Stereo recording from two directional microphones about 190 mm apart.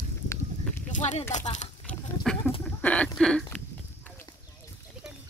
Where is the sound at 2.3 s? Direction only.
5° left (ahead or behind).